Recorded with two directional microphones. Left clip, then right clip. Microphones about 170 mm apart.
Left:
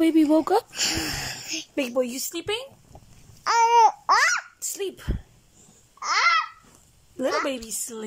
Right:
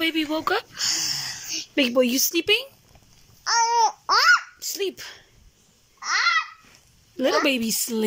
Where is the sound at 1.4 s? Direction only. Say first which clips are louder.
Right 1 dB; 55° left (ahead or behind).